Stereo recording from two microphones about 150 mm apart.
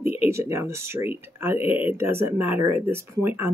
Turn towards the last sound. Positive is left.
turn(degrees=-15)  # may be behind; listen again after turning